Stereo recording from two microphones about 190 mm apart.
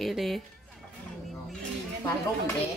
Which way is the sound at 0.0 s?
Centre (ahead or behind).